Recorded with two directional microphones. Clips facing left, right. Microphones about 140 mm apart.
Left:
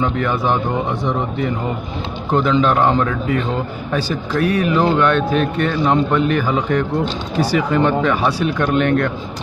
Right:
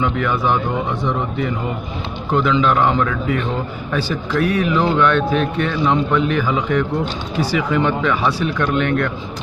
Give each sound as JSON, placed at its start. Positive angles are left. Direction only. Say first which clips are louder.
{"t": 0.0, "sound": "speech", "louder": "even", "side_deg": 35}
{"t": 2.3, "sound": "speech", "louder": "left 1 dB", "side_deg": 40}